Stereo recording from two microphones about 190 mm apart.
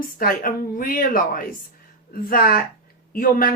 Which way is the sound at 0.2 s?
50° left (ahead or behind).